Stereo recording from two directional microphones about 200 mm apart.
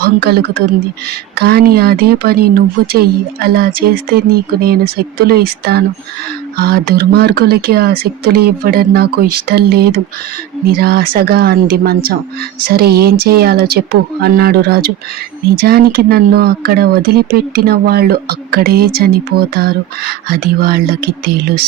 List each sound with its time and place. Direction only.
0.0 s speech: 50° right (ahead or behind)